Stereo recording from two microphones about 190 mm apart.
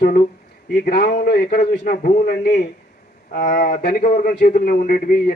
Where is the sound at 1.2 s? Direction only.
60° left (ahead or behind).